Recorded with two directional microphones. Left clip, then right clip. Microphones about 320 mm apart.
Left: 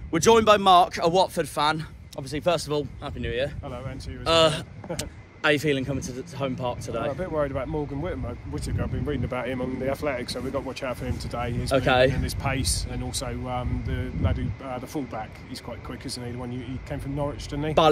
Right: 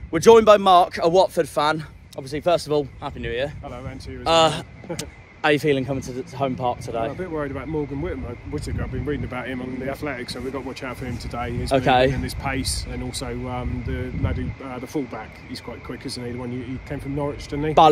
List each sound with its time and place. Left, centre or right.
0.1 s speech: centre
2.8 s a man's voice: centre
7.2 s speech: centre
11.7 s a man's voice: centre
12.2 s speech: centre